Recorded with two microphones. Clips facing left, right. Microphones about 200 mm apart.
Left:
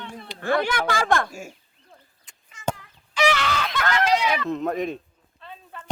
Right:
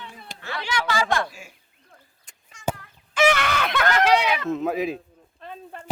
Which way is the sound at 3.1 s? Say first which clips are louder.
Right 2 dB; 55° right (ahead or behind).